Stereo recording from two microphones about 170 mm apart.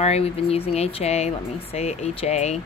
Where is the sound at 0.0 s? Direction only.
35° left (ahead or behind).